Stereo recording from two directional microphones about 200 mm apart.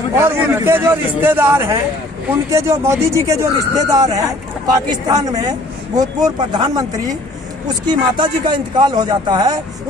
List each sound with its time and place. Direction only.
0.1 s speech: 10° right (ahead or behind)